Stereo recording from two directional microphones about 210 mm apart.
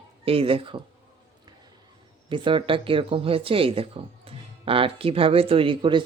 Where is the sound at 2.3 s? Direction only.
25° right (ahead or behind).